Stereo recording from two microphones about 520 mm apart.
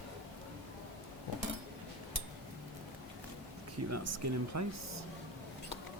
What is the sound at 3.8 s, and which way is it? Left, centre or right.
Speech, right.